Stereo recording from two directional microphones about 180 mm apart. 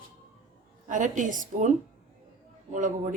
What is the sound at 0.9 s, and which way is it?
Speech, 45° right (ahead or behind).